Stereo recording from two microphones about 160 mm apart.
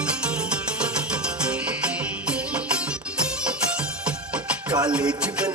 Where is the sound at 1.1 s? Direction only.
5° right (ahead or behind).